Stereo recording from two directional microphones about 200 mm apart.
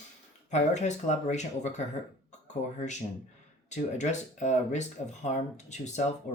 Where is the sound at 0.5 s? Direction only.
35° left (ahead or behind).